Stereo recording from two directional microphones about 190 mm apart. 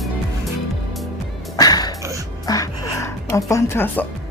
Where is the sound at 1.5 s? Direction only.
20° left (ahead or behind).